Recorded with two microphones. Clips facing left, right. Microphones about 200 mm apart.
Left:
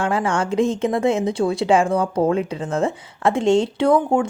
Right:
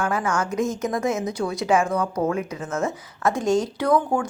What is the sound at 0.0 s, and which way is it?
Speech, 30° left (ahead or behind).